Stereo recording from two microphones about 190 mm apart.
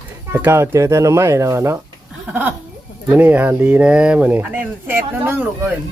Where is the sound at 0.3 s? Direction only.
10° right (ahead or behind).